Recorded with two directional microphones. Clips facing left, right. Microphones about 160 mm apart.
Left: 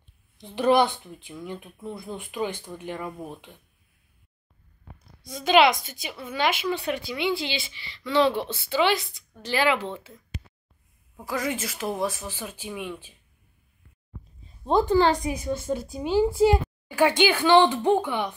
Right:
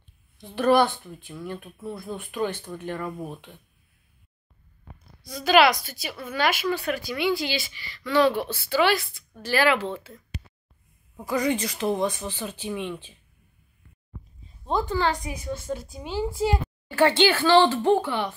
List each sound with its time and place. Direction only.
0.6 s a woman's voice: 15° left (ahead or behind)
5.3 s a woman's voice: 20° left (ahead or behind)
11.1 s speech: centre (ahead or behind)
14.7 s a woman's voice: 30° left (ahead or behind)